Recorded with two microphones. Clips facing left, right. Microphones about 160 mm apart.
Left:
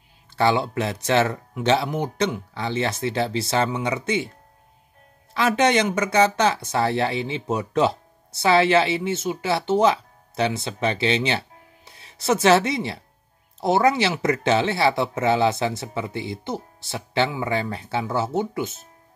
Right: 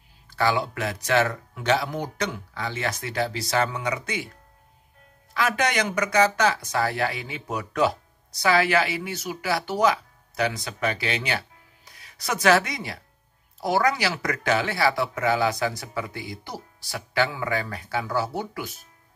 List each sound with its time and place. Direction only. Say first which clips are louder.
0.3 s speech: left 3 dB; 25° left (ahead or behind)
5.3 s speech: left 5 dB; 25° left (ahead or behind)